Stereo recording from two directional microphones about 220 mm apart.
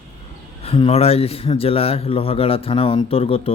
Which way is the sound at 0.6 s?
25° left (ahead or behind).